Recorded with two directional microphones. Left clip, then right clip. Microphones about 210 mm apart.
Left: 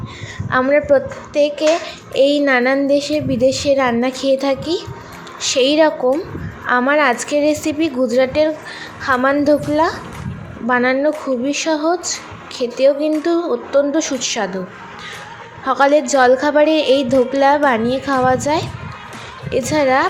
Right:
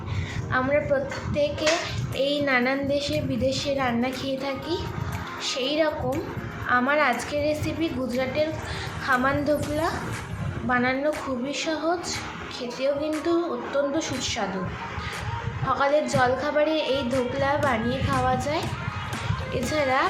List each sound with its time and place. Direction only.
0.5 s speech: 35° left (ahead or behind)
15.7 s speech: 40° left (ahead or behind)